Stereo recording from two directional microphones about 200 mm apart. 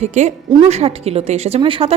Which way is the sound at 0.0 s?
35° right (ahead or behind).